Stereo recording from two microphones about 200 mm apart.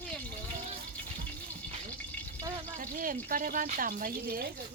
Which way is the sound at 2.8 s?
45° right (ahead or behind).